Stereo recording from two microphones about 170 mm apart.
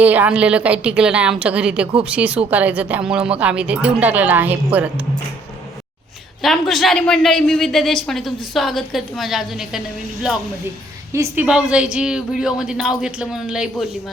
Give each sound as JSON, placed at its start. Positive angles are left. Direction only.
{"t": 0.0, "sound": "speech", "side_deg": -10}
{"t": 6.4, "sound": "a woman's voice", "side_deg": 0}
{"t": 11.1, "sound": "speech", "side_deg": -15}
{"t": 11.4, "sound": "a woman's voice", "side_deg": -5}